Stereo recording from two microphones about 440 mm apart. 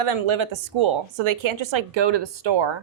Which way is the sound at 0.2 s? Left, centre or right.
Right.